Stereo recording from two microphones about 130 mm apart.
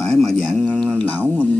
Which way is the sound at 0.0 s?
5° left (ahead or behind).